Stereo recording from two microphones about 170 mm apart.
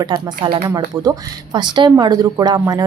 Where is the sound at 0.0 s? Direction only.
25° right (ahead or behind).